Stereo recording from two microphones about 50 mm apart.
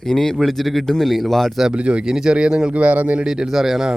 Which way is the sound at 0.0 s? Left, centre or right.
Centre.